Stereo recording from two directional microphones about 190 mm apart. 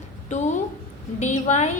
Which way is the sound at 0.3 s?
40° left (ahead or behind).